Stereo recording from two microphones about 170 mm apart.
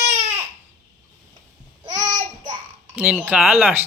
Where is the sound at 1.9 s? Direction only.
25° right (ahead or behind).